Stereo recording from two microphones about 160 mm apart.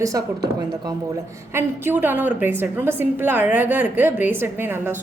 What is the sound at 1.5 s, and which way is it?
A woman's voice, 15° right (ahead or behind).